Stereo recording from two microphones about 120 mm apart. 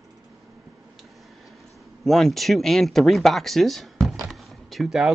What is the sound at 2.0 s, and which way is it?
Speech, 5° left (ahead or behind).